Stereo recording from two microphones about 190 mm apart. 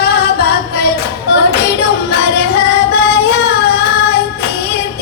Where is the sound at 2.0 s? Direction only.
60° left (ahead or behind).